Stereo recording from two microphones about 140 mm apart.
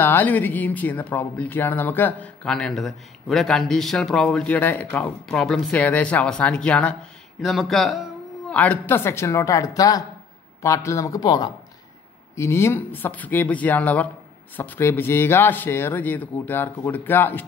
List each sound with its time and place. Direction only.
0.0 s speech: 15° left (ahead or behind)
8.5 s speech: 10° left (ahead or behind)